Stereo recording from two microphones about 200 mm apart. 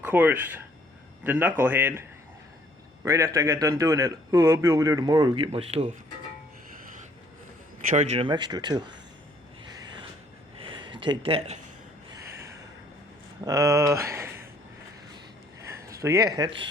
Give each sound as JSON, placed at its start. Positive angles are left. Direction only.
{"t": 0.0, "sound": "a man's voice", "side_deg": -10}
{"t": 7.9, "sound": "speech", "side_deg": -35}
{"t": 9.7, "sound": "a sound", "side_deg": -20}
{"t": 12.1, "sound": "gasp", "side_deg": -15}
{"t": 13.4, "sound": "speech", "side_deg": -15}
{"t": 15.7, "sound": "speech", "side_deg": -15}